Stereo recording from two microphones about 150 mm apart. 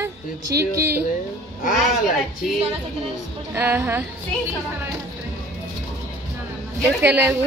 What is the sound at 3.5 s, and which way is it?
Speech, 15° right (ahead or behind).